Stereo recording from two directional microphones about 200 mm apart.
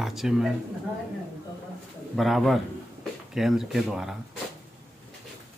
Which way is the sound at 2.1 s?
Centre (ahead or behind).